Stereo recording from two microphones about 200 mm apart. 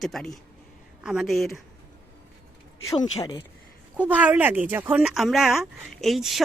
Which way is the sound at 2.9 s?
20° left (ahead or behind).